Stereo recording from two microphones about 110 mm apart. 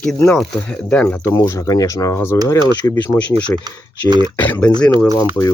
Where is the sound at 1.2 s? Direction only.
25° left (ahead or behind).